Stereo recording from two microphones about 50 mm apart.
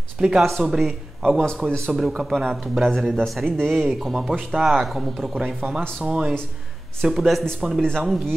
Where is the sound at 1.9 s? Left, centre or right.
Centre.